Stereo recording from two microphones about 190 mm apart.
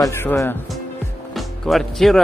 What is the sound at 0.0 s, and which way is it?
Speech, 10° left (ahead or behind).